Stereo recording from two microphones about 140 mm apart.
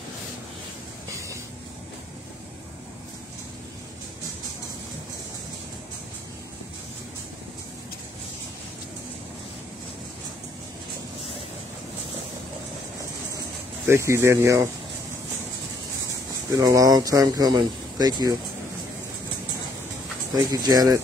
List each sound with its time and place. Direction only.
13.8 s speech: 20° right (ahead or behind)
16.5 s speech: 25° right (ahead or behind)
20.4 s speech: 25° right (ahead or behind)